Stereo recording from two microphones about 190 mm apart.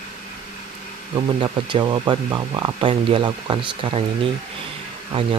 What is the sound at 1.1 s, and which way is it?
Speech, 25° right (ahead or behind).